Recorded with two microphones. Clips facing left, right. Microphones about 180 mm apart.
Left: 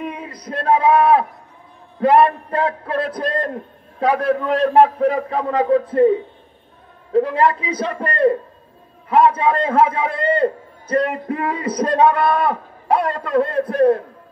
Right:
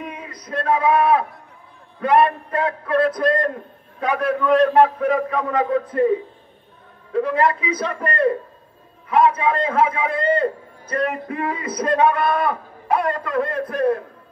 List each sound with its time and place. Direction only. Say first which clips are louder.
0.1 s a man's voice: left 1 dB; 30° left (ahead or behind)
7.2 s a man's voice: left 3 dB; 30° left (ahead or behind)